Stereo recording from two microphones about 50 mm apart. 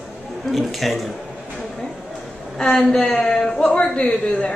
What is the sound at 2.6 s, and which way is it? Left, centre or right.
A woman's voice, centre.